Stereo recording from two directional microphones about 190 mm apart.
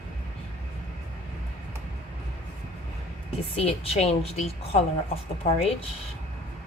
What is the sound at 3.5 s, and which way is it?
Speech, 30° left (ahead or behind).